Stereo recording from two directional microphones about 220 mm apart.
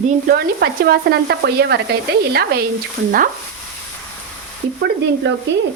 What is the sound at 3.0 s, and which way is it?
Speech, 40° right (ahead or behind).